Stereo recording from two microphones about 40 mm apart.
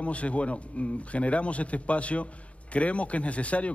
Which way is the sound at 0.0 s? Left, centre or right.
Left.